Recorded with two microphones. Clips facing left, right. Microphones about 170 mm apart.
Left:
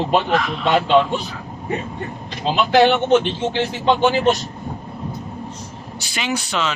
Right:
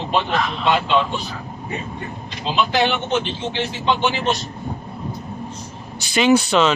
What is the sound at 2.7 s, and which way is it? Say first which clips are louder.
Speech: left 10 dB; 55° left (ahead or behind).